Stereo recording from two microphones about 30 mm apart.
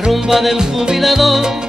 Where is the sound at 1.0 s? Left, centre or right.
Centre.